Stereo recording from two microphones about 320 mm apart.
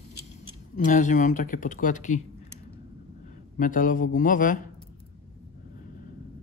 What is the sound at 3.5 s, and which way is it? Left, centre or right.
Speech, left.